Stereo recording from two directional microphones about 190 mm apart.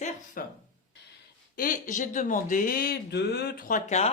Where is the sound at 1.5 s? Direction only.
45° left (ahead or behind).